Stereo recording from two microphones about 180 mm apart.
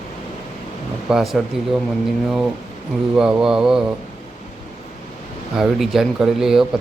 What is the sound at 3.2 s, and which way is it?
Speech, 5° right (ahead or behind).